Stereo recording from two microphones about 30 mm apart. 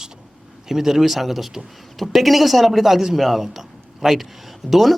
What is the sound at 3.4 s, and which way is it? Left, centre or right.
Speech, centre.